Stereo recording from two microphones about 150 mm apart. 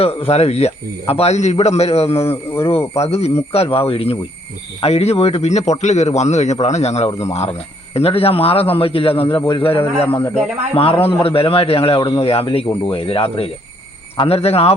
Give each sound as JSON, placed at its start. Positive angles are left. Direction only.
{"t": 0.0, "sound": "a man's voice", "side_deg": 40}
{"t": 2.3, "sound": "speech", "side_deg": 15}
{"t": 3.0, "sound": "a man's voice", "side_deg": 45}